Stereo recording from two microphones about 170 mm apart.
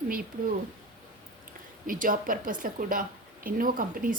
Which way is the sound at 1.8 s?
55° right (ahead or behind).